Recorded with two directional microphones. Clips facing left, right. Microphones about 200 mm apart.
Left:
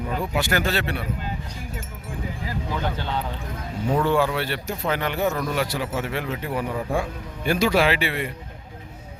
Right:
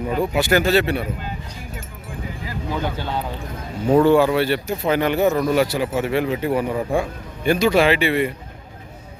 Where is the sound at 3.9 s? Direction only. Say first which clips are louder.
Right 8 dB; 35° right (ahead or behind).